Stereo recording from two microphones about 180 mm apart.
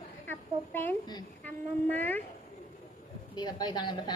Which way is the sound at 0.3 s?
10° left (ahead or behind).